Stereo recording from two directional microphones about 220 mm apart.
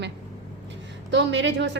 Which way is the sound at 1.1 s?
55° right (ahead or behind).